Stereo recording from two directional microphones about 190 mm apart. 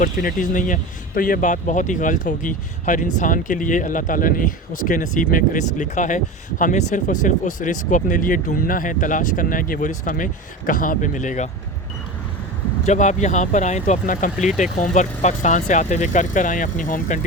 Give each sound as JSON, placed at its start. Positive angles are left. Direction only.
{"t": 0.0, "sound": "speech", "side_deg": 45}
{"t": 12.8, "sound": "speech", "side_deg": 40}